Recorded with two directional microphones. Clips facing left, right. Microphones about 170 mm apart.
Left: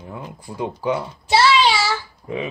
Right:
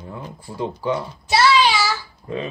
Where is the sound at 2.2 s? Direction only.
15° left (ahead or behind).